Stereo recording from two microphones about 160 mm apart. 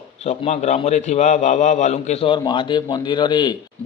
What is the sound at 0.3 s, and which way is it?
A man's voice, 45° left (ahead or behind).